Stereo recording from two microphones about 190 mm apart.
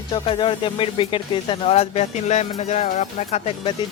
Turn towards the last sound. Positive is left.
turn(degrees=35)  # may be behind; listen again after turning